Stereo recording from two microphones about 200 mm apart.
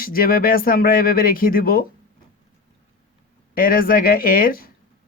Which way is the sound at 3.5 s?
45° left (ahead or behind).